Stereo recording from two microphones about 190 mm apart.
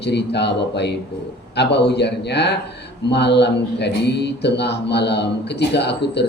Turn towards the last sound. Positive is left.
turn(degrees=60)  # may be behind; listen again after turning